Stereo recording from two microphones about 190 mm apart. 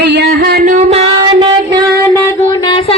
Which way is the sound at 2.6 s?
25° left (ahead or behind).